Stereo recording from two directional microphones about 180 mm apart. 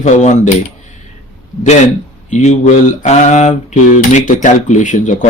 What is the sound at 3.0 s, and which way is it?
Mantra, 40° left (ahead or behind).